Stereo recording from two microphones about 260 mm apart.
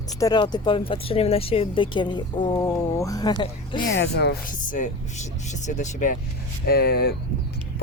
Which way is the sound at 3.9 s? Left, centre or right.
Left.